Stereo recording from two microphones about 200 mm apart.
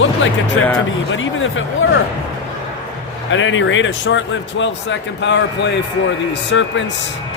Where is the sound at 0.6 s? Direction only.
90° left.